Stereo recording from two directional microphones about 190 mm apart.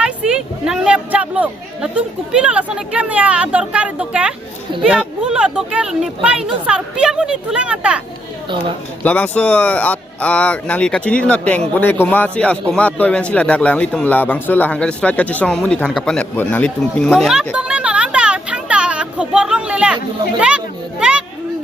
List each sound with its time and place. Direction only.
0.0 s speech: 5° right (ahead or behind)
4.7 s speech: 25° right (ahead or behind)
5.2 s speech: 5° right (ahead or behind)
8.4 s speech: 25° right (ahead or behind)
9.0 s a man's voice: 10° left (ahead or behind)
21.0 s a child's voice: 5° right (ahead or behind)